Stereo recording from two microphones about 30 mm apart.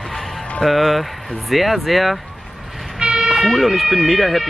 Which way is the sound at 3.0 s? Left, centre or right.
Right.